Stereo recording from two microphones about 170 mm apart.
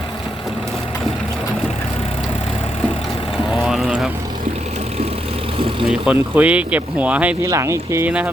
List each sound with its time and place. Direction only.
3.6 s vehicle: centre (ahead or behind)
5.9 s speech: 5° right (ahead or behind)